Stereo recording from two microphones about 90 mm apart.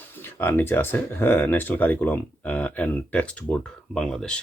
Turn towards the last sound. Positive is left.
turn(degrees=10)  # may be behind; listen again after turning